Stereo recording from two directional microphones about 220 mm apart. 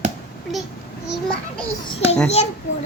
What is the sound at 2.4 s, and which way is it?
Speech, 30° left (ahead or behind).